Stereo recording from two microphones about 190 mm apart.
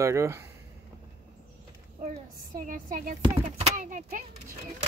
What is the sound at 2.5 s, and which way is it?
Speech, 45° right (ahead or behind).